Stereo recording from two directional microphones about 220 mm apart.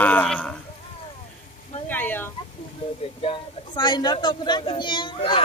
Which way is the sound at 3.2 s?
20° left (ahead or behind).